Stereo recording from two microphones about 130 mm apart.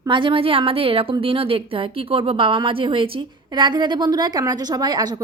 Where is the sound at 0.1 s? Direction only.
40° right (ahead or behind).